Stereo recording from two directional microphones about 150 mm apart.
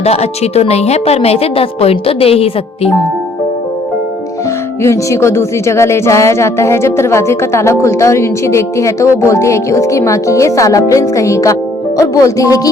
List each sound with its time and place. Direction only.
0.0 s a woman's voice: 45° left (ahead or behind)
4.8 s speech: 20° left (ahead or behind)